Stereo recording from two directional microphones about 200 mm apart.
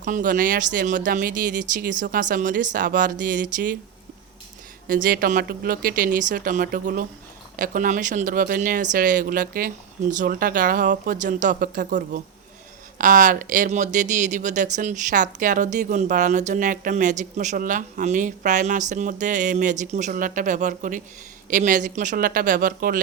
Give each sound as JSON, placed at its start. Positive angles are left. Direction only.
{"t": 0.0, "sound": "speech", "side_deg": -40}
{"t": 4.9, "sound": "speech", "side_deg": -45}